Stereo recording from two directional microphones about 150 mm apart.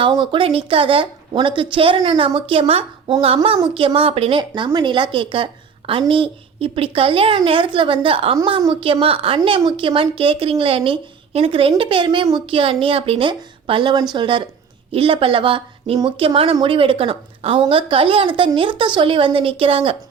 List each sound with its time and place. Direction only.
0.0 s speech: 35° right (ahead or behind)